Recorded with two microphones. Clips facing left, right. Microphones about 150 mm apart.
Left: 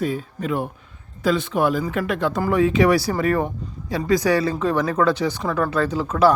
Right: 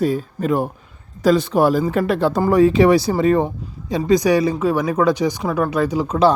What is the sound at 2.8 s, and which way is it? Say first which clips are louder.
Speech: right 4 dB; 20° right (ahead or behind).